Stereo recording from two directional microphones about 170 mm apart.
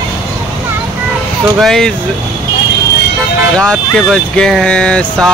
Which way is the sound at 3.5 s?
5° left (ahead or behind).